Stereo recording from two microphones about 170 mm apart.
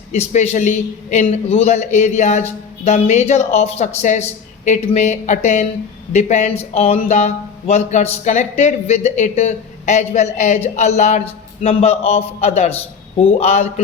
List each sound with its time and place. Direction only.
0.1 s a man's voice: 40° left (ahead or behind)